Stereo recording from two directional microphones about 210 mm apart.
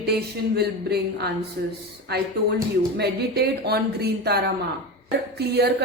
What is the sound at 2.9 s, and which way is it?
A woman's voice, 50° right (ahead or behind).